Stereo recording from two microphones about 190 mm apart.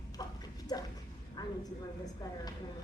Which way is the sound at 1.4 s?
20° left (ahead or behind).